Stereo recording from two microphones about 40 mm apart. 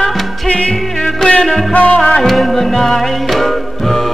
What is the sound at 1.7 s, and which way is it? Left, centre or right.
Music, left.